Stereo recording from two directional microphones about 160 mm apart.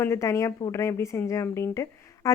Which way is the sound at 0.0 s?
15° left (ahead or behind).